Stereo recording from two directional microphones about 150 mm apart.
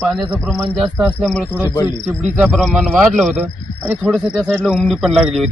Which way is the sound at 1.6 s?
30° left (ahead or behind).